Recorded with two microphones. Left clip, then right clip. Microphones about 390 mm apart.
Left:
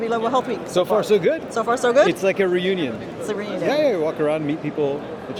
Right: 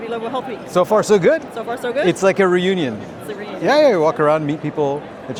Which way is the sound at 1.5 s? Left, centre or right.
Left.